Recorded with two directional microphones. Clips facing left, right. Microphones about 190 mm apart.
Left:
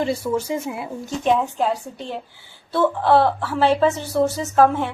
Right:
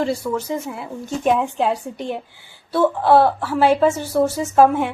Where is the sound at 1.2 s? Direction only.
15° right (ahead or behind).